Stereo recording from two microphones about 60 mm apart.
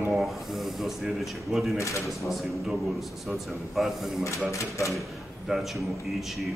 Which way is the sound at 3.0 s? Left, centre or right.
Centre.